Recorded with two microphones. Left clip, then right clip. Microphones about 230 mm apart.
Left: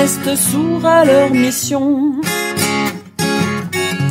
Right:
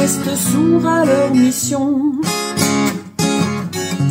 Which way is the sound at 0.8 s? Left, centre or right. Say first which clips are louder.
Left 4 dB; left.